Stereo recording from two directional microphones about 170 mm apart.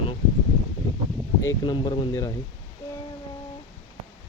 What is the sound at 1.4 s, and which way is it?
Speech, 20° left (ahead or behind).